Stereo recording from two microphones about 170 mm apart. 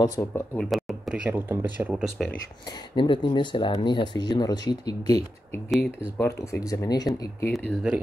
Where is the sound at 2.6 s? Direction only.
25° left (ahead or behind).